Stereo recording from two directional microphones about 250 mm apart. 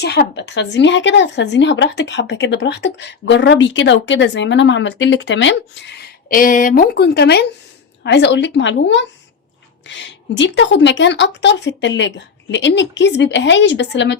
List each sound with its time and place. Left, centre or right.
0.0 s speech: left